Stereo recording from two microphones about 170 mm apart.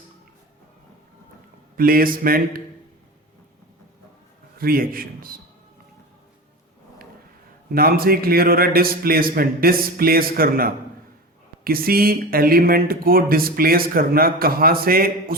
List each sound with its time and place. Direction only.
1.7 s speech: 60° right (ahead or behind)
4.5 s speech: 60° right (ahead or behind)
7.7 s speech: 60° right (ahead or behind)